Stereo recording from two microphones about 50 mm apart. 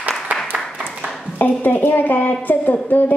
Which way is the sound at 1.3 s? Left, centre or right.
Left.